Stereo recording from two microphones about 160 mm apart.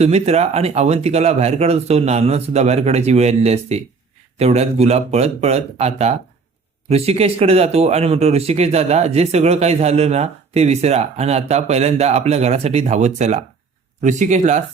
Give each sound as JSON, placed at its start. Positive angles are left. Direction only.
{"t": 0.0, "sound": "speech", "side_deg": -40}